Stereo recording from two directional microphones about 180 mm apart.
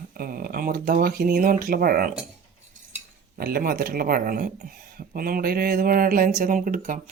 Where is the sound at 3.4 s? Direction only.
60° right (ahead or behind).